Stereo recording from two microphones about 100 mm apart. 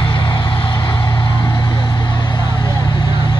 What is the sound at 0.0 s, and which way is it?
Vehicle, 55° left (ahead or behind).